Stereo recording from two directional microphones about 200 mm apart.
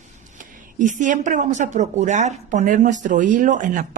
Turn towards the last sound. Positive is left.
turn(degrees=-40)  # may be behind; listen again after turning